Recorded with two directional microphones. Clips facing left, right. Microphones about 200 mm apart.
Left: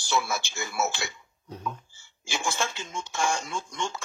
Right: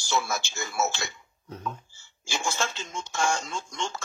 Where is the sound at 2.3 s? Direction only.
15° right (ahead or behind).